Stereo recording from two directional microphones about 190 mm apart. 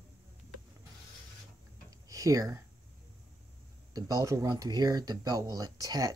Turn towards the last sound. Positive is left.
turn(degrees=-20)  # may be behind; listen again after turning